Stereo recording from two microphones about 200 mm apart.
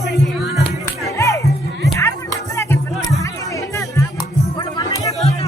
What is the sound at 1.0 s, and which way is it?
Music, 15° left (ahead or behind).